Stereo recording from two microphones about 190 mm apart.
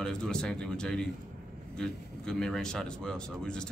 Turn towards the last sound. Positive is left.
turn(degrees=5)  # may be behind; listen again after turning